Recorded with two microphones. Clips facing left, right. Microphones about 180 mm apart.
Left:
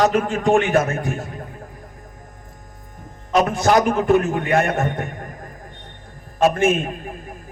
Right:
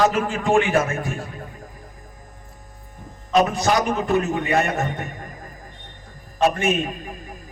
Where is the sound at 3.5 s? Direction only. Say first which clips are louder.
Left 4 dB; 55° left (ahead or behind).